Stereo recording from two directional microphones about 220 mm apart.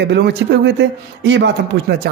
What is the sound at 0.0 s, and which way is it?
A man's voice, 50° right (ahead or behind).